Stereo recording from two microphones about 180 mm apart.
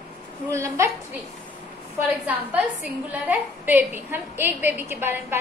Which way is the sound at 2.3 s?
10° right (ahead or behind).